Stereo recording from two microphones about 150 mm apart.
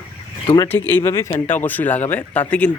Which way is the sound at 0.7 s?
15° left (ahead or behind).